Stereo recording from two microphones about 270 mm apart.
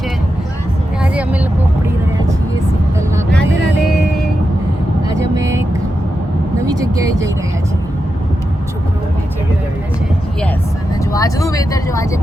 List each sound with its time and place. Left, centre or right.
1.0 s vehicle: centre
5.0 s vehicle: centre
6.7 s vehicle: centre
11.1 s vehicle: centre